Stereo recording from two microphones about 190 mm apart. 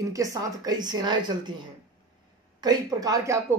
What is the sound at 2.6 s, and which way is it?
Speech, 20° right (ahead or behind).